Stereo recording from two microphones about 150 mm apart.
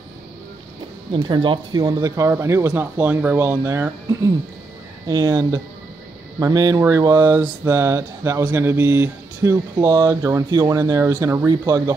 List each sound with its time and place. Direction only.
1.1 s speech: 35° right (ahead or behind)